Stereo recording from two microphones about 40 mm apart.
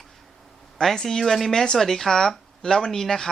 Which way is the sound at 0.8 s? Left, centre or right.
Centre.